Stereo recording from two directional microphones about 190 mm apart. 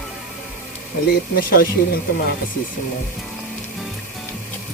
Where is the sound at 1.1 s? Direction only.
50° left (ahead or behind).